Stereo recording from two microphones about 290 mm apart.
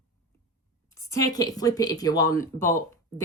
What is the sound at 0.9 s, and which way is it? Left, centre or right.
Speech, centre.